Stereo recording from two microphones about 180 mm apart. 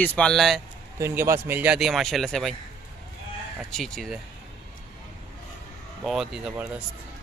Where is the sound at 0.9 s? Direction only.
15° right (ahead or behind); by 2.5 s centre (ahead or behind).